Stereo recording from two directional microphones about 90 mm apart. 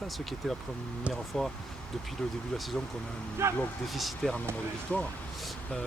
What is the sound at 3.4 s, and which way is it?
Speech, 30° right (ahead or behind).